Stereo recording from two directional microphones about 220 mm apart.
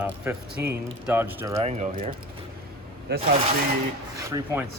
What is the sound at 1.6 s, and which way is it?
Speech, 30° right (ahead or behind).